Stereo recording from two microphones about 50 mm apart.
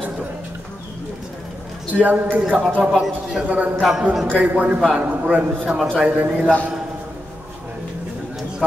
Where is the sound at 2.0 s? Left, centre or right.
Right.